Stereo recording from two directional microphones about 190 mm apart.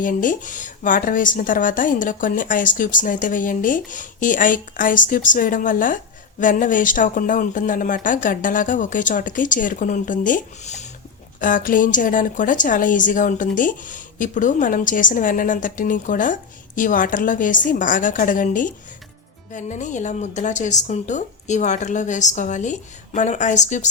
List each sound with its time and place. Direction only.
0.0 s a woman's voice: 45° left (ahead or behind)